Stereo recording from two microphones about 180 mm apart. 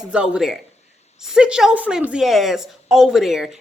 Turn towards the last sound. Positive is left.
turn(degrees=0)  # may be behind; listen again after turning